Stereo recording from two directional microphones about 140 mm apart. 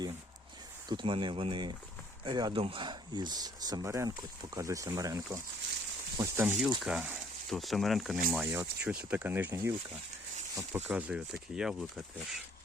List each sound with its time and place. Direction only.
0.9 s speech: 35° right (ahead or behind); by 8.2 s centre (ahead or behind)
8.3 s speech: 15° right (ahead or behind)